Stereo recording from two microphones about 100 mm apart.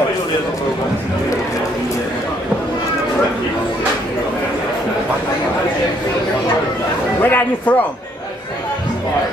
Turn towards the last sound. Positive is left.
turn(degrees=20)  # may be behind; listen again after turning